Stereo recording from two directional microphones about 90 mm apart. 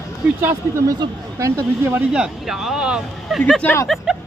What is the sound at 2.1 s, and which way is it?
Speech, 5° right (ahead or behind).